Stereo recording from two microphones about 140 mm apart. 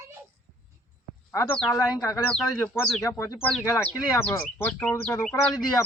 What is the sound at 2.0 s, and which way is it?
Speech, 25° left (ahead or behind).